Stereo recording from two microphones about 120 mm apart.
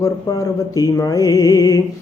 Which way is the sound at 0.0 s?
30° left (ahead or behind).